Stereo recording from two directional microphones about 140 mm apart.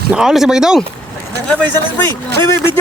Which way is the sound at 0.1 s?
5° right (ahead or behind).